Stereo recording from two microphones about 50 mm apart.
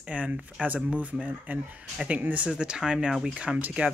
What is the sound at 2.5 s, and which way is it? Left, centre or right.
Speech, centre.